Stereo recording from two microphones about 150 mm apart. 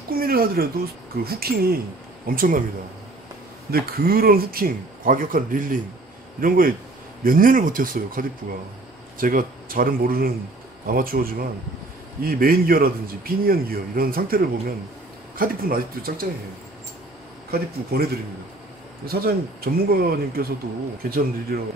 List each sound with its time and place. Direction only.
0.1 s speech: 80° right
2.2 s a man's voice: 70° right (ahead or behind)
3.7 s a man's voice: 90° right
17.5 s speech: 90° right